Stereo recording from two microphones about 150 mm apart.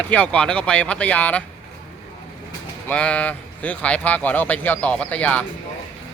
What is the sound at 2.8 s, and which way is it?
Speech, 10° left (ahead or behind).